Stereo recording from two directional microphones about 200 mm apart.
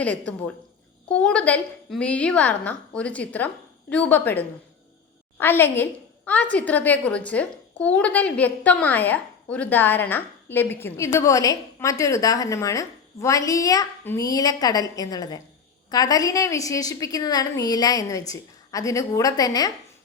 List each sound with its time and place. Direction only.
0.0 s a woman's voice: 5° left (ahead or behind)